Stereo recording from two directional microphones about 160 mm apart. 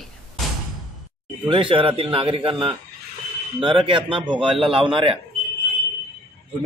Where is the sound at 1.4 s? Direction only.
35° right (ahead or behind).